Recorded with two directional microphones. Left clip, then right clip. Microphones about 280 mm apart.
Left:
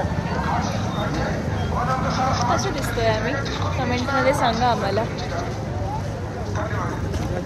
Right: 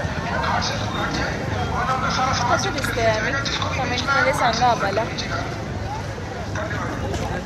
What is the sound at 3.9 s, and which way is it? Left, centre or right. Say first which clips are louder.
Speech: right 1 dB; centre.